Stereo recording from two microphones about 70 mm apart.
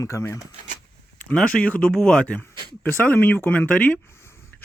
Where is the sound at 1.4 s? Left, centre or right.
Centre.